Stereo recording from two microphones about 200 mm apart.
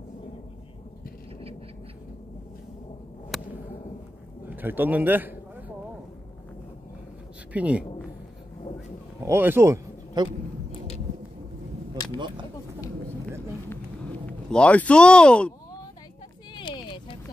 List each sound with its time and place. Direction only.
3.3 s whip: centre (ahead or behind)
4.5 s a man's voice: 10° right (ahead or behind)
7.5 s a woman's voice: 5° right (ahead or behind)
9.2 s speech: 10° right (ahead or behind)
13.7 s a sound: 5° left (ahead or behind)
16.5 s a sound: 25° left (ahead or behind)